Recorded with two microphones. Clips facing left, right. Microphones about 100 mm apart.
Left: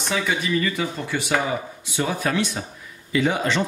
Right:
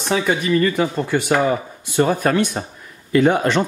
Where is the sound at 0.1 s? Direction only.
45° right (ahead or behind).